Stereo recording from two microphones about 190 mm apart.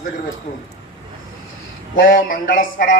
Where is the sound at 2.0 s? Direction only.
50° left (ahead or behind).